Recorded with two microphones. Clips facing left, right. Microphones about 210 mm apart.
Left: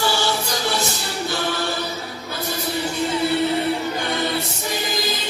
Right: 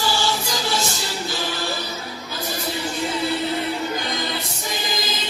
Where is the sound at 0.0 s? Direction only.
65° left (ahead or behind).